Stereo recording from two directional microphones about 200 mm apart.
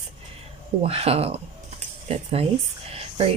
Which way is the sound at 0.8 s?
30° right (ahead or behind).